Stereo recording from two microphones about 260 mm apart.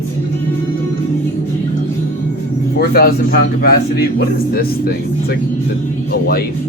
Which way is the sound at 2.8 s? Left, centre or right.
Left.